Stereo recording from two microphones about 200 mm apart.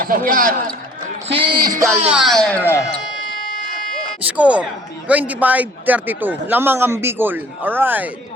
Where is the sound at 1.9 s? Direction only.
5° right (ahead or behind).